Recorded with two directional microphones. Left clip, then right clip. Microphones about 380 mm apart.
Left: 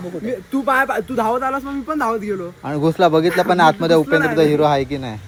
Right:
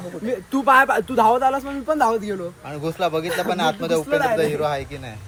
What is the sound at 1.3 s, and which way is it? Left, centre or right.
Speech, right.